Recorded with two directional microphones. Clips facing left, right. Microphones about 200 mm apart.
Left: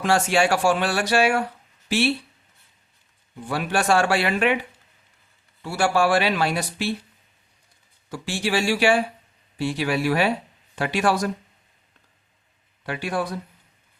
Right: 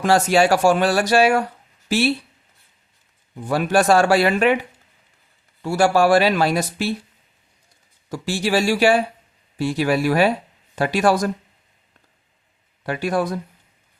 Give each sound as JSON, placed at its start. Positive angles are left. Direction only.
{"t": 0.0, "sound": "speech", "side_deg": -40}
{"t": 3.5, "sound": "speech", "side_deg": -40}
{"t": 5.6, "sound": "speech", "side_deg": -40}
{"t": 8.1, "sound": "speech", "side_deg": -40}
{"t": 12.8, "sound": "speech", "side_deg": -45}